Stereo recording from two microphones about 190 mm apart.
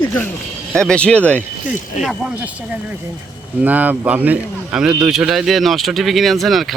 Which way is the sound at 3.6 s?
10° right (ahead or behind).